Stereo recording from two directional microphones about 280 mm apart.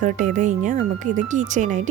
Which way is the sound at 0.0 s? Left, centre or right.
Right.